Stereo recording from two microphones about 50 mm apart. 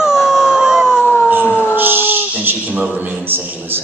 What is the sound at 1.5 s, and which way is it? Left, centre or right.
Dog, left.